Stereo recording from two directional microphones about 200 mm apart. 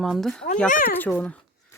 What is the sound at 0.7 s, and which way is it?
Speech, 45° left (ahead or behind).